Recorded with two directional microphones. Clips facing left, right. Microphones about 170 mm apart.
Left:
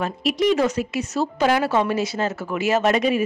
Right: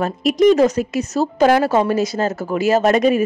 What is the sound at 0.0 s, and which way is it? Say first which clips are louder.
Speech: right 7 dB; 45° right (ahead or behind).